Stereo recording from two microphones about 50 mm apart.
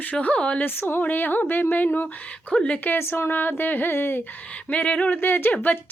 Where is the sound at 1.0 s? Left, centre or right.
Left.